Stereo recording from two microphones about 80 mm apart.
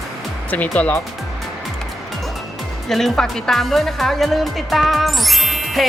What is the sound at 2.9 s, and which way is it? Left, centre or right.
Speech, centre.